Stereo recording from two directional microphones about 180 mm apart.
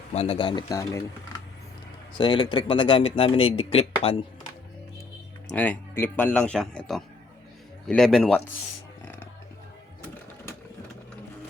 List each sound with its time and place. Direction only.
0.1 s speech: 35° left (ahead or behind)
5.5 s speech: 10° left (ahead or behind)